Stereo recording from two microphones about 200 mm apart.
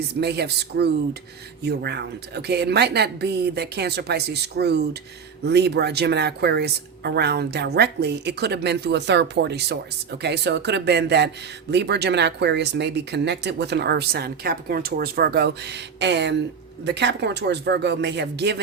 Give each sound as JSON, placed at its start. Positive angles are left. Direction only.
{"t": 0.2, "sound": "speech", "side_deg": -55}